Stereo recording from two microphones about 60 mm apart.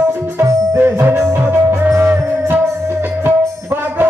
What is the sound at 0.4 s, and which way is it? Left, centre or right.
Music, right.